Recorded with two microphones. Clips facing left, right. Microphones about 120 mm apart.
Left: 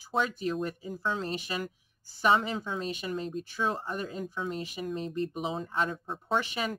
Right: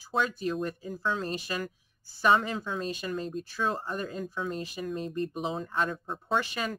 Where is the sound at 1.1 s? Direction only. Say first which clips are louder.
Right 1 dB; 15° left (ahead or behind).